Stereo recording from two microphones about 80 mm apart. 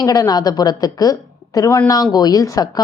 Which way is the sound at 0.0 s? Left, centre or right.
Left.